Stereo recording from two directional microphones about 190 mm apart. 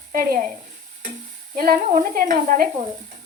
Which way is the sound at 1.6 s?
50° right (ahead or behind).